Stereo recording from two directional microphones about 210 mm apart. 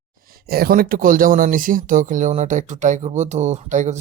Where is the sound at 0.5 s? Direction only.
45° right (ahead or behind).